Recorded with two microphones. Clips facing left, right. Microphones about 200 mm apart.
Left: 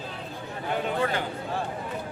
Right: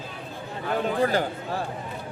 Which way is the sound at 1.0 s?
35° right (ahead or behind).